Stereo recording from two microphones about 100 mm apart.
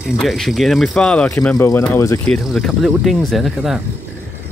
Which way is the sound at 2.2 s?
10° left (ahead or behind).